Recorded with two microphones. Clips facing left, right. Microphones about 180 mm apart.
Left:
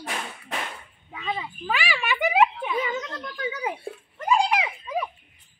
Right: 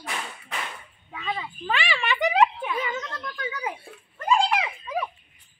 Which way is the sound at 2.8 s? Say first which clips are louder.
Left 1 dB; 25° left (ahead or behind).